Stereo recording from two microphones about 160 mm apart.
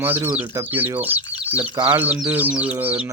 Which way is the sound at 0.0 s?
15° right (ahead or behind).